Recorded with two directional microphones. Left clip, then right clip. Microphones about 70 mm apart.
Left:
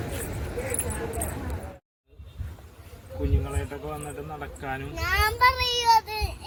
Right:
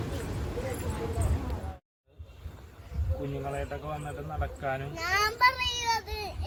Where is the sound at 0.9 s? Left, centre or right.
Centre.